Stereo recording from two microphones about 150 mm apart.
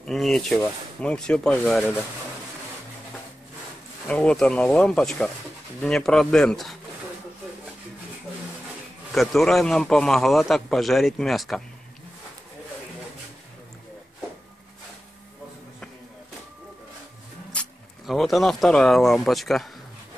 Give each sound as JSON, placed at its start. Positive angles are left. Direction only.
{"t": 0.0, "sound": "a man's voice", "side_deg": 0}
{"t": 4.1, "sound": "a man's voice", "side_deg": 5}
{"t": 9.1, "sound": "a man's voice", "side_deg": 0}
{"t": 17.5, "sound": "speech", "side_deg": 5}